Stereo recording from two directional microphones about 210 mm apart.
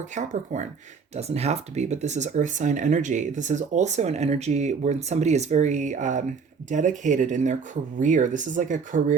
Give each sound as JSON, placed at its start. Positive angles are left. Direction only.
{"t": 0.0, "sound": "speech", "side_deg": -35}